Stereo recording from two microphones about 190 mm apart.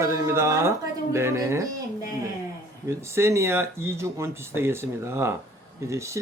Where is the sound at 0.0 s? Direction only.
15° right (ahead or behind).